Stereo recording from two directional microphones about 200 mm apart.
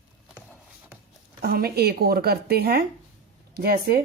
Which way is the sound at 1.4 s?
50° right (ahead or behind).